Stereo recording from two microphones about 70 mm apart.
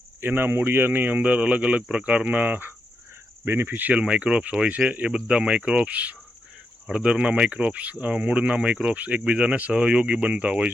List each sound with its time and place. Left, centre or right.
0.2 s speech: right